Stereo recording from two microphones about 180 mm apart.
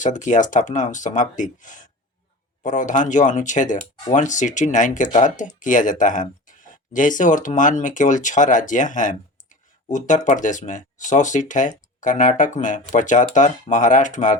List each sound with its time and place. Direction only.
0.0 s speech: 45° left (ahead or behind)